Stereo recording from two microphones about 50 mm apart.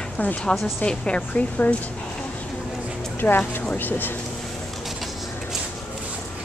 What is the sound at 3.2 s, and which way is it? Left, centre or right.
Speech, left.